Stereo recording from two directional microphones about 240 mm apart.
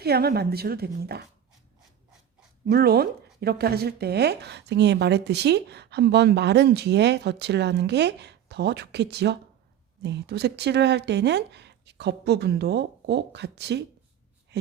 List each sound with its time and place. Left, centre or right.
0.0 s a woman's voice: right
2.6 s speech: right